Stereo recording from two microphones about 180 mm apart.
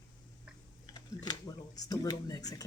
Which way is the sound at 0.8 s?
20° left (ahead or behind).